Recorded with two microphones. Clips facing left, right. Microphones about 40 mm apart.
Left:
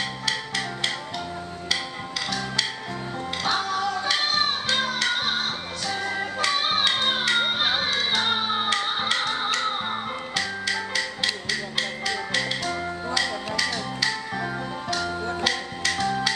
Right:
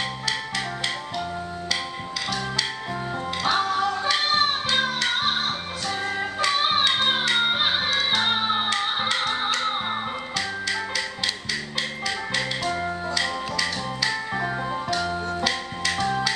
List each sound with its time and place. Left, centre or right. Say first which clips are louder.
0.3 s music: left 1 dB; centre
3.4 s music: right 3 dB; centre
4.1 s music: right 2 dB; centre
12.1 s organ: even; centre
16.0 s finger snapping: right 1 dB; centre